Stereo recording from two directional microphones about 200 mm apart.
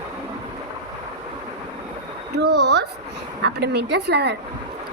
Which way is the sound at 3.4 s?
55° right (ahead or behind).